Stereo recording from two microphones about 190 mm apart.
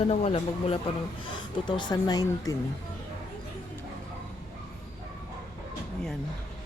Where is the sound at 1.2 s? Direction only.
25° left (ahead or behind).